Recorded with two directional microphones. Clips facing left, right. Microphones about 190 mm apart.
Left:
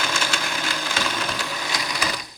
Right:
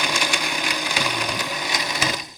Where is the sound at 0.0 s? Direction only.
15° right (ahead or behind).